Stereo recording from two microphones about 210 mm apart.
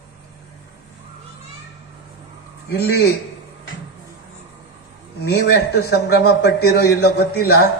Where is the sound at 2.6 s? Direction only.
50° left (ahead or behind).